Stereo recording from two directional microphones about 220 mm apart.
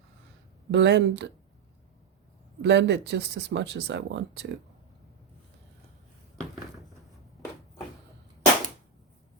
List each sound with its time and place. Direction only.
0.7 s speech: 55° right (ahead or behind)
2.6 s speech: 50° right (ahead or behind)